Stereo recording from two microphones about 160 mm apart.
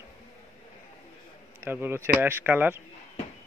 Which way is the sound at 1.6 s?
15° right (ahead or behind).